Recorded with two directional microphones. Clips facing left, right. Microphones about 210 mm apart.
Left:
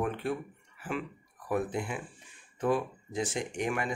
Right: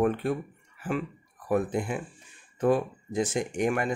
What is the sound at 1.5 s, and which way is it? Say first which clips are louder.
Speech: right 5 dB; 45° right (ahead or behind).